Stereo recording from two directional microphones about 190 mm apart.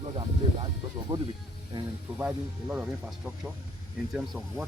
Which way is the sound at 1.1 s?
20° right (ahead or behind).